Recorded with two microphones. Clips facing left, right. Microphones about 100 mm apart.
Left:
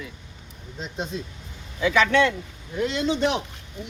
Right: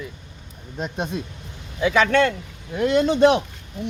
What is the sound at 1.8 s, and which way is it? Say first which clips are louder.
Speech: right 2 dB; 45° right (ahead or behind).